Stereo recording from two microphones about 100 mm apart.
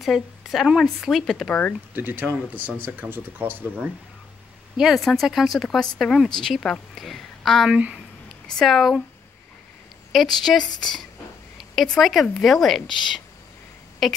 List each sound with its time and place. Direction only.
0.0 s speech: centre (ahead or behind)
1.5 s speech: 15° left (ahead or behind)
2.0 s speech: 20° right (ahead or behind)
4.7 s speech: 5° right (ahead or behind)
7.7 s speech: 10° right (ahead or behind)
8.5 s speech: centre (ahead or behind)
10.4 s speech: centre (ahead or behind)
14.0 s speech: centre (ahead or behind)